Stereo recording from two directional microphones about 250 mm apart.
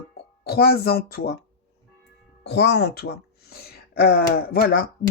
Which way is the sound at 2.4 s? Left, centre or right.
Left.